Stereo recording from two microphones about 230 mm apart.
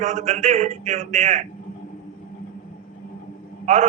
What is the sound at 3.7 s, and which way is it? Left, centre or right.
Speech, right.